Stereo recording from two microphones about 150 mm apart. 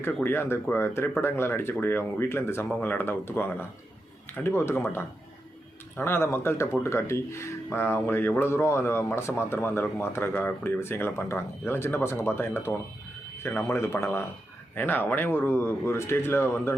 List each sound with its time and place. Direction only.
0.0 s speech: 15° left (ahead or behind)